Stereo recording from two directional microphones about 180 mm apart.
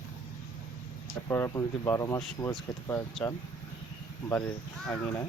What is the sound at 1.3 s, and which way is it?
Speech, 15° left (ahead or behind).